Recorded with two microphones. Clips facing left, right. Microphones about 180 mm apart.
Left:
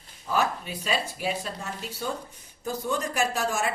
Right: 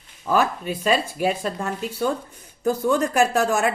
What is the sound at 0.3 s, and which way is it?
A woman's voice, 50° right (ahead or behind).